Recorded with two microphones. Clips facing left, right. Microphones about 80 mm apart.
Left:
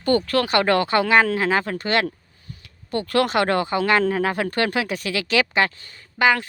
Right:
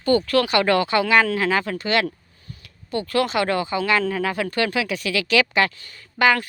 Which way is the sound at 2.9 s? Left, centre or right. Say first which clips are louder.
Left 1 dB; left.